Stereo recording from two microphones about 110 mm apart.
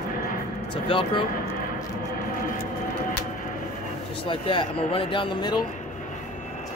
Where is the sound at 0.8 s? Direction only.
50° left (ahead or behind).